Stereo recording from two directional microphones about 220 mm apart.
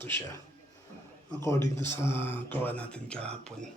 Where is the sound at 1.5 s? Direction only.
15° left (ahead or behind).